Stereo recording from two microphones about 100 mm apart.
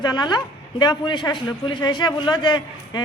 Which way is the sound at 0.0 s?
45° left (ahead or behind).